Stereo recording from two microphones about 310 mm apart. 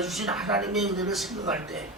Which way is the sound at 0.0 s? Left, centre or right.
Centre.